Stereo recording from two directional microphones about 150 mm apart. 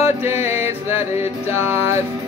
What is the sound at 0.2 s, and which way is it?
Music, 15° right (ahead or behind).